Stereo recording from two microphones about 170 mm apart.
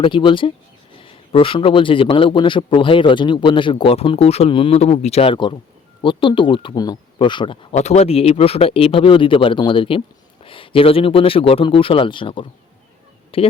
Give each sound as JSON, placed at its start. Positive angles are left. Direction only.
{"t": 0.0, "sound": "a man's voice", "side_deg": 30}